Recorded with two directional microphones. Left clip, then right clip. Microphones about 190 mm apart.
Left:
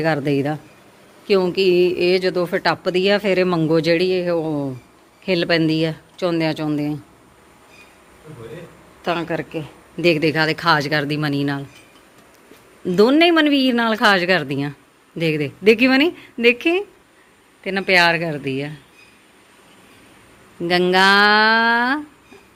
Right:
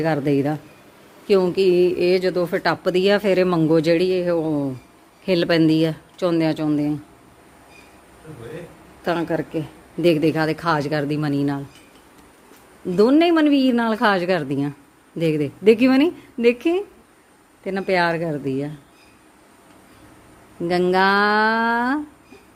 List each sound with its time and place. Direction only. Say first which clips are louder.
0.0 s speech: left 1 dB; 5° right (ahead or behind)
2.8 s a man's voice: even; 15° right (ahead or behind)
9.0 s speech: even; 15° right (ahead or behind)
13.0 s a man's voice: left 2 dB; centre (ahead or behind)
20.7 s speech: left 3 dB; 5° right (ahead or behind)